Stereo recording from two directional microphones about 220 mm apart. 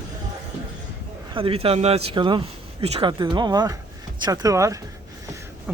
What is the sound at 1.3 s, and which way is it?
Speech, 25° right (ahead or behind).